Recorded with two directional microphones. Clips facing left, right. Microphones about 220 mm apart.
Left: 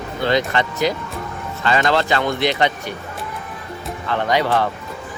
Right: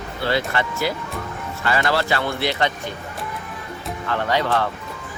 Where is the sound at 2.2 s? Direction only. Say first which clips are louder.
Left 4 dB; 15° left (ahead or behind).